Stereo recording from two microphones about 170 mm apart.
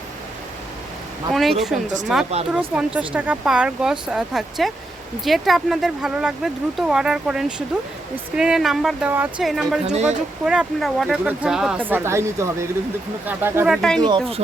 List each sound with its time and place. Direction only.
1.3 s speech: centre (ahead or behind)
2.3 s speech: 40° right (ahead or behind)
2.7 s speech: 5° right (ahead or behind)
9.8 s speech: 40° right (ahead or behind)
10.4 s speech: 5° right (ahead or behind)
13.7 s speech: 5° left (ahead or behind)
14.0 s speech: 30° right (ahead or behind)